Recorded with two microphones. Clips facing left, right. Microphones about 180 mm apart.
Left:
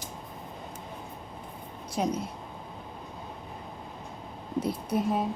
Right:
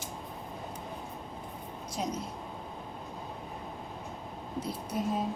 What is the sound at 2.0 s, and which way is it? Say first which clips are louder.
Speech: left 6 dB; 65° left (ahead or behind).